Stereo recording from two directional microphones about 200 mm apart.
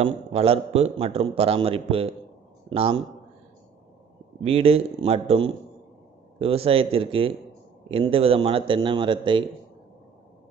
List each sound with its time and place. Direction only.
0.0 s a man's voice: 30° right (ahead or behind)
4.4 s a man's voice: 30° right (ahead or behind)